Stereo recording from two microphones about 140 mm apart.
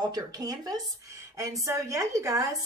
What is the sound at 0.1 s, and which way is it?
A woman's voice, 25° right (ahead or behind).